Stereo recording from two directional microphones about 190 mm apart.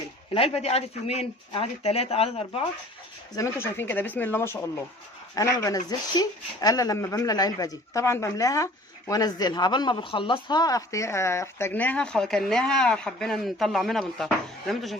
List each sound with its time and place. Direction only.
0.3 s speech: 30° left (ahead or behind)
3.3 s speech: 15° left (ahead or behind)